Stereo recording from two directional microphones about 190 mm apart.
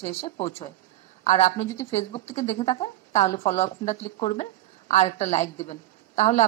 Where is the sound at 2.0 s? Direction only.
35° left (ahead or behind).